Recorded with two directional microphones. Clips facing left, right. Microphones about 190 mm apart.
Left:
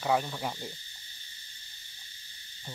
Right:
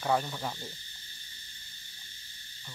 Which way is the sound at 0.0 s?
5° left (ahead or behind).